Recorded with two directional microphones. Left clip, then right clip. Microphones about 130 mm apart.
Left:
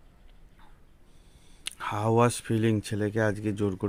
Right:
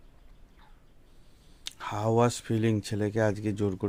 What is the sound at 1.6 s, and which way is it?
Speech, 15° left (ahead or behind).